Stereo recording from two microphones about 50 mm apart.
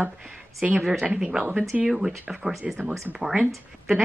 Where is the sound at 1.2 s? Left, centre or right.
Centre.